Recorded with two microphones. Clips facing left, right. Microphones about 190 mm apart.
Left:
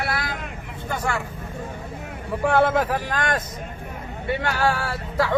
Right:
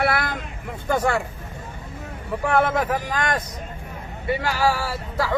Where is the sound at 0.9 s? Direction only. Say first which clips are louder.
Right 5 dB; 35° right (ahead or behind).